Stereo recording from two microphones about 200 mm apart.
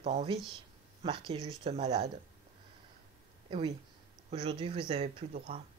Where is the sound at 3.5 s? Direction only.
25° right (ahead or behind).